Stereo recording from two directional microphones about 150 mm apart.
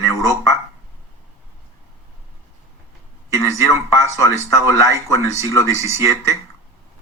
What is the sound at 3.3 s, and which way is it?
Speech, 20° left (ahead or behind).